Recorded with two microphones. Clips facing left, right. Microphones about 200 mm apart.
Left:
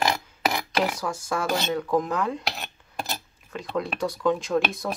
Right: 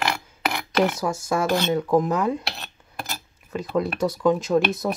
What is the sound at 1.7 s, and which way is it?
Speech, 10° right (ahead or behind).